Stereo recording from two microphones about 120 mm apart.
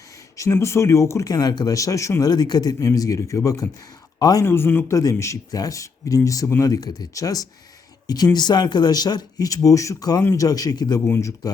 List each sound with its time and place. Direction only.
0.3 s speech: 25° left (ahead or behind)
4.4 s speech: 20° left (ahead or behind); by 11.0 s 35° left (ahead or behind)
11.0 s speech: 20° left (ahead or behind)